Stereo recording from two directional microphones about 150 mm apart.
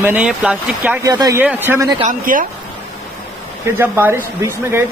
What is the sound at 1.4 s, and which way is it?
Speech, 10° right (ahead or behind).